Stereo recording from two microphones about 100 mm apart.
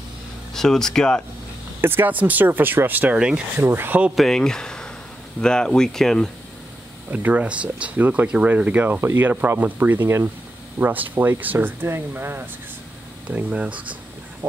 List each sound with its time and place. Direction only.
0.6 s speech: 5° left (ahead or behind)
1.8 s speech: 20° right (ahead or behind)
3.6 s speech: 20° right (ahead or behind)
4.1 s speech: 5° left (ahead or behind)
7.1 s speech: 15° right (ahead or behind)